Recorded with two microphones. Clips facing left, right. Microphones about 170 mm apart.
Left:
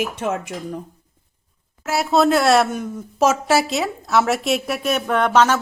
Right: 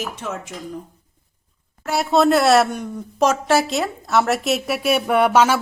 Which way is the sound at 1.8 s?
Centre (ahead or behind).